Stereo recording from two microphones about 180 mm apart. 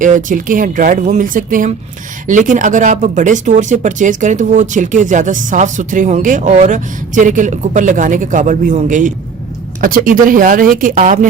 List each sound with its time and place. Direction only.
0.0 s speech: 45° right (ahead or behind)